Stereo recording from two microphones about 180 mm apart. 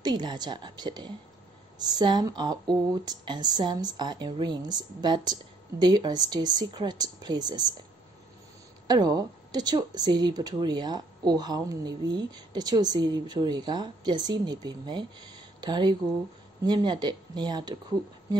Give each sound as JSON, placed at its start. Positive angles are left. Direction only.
{"t": 0.0, "sound": "speech", "side_deg": -25}
{"t": 8.8, "sound": "speech", "side_deg": -20}